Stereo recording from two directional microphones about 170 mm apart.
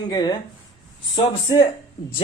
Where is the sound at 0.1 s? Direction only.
25° left (ahead or behind).